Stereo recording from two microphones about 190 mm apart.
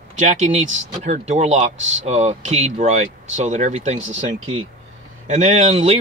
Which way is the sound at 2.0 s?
35° right (ahead or behind).